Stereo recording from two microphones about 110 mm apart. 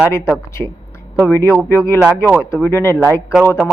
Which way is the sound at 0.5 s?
25° left (ahead or behind).